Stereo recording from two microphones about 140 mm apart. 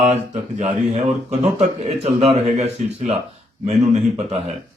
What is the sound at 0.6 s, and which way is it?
Speech, 50° right (ahead or behind).